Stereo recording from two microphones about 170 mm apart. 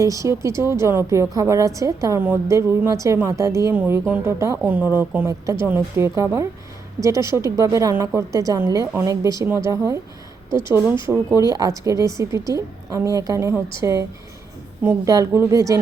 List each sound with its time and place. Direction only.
0.0 s a woman's voice: 20° right (ahead or behind)